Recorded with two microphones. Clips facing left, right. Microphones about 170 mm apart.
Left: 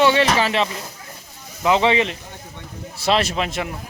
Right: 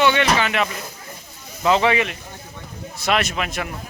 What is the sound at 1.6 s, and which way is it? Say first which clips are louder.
A man's voice: left 1 dB; 20° left (ahead or behind).